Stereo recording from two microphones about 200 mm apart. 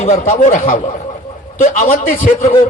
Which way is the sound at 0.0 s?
35° left (ahead or behind).